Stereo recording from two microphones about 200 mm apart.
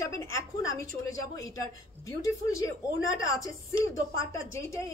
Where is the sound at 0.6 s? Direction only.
15° left (ahead or behind).